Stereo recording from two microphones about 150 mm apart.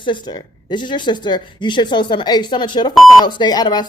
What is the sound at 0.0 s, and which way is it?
A woman's voice, 30° left (ahead or behind).